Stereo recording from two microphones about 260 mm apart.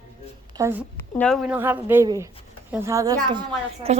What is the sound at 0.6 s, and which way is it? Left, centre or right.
Speech, centre.